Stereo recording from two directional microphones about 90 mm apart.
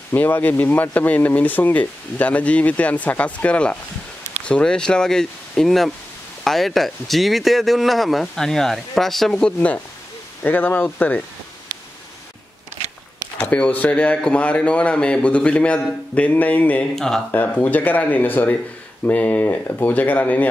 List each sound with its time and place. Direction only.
0.1 s speech: 20° left (ahead or behind)
13.4 s speech: 15° left (ahead or behind)
16.9 s speech: 5° left (ahead or behind)
17.3 s speech: 20° left (ahead or behind)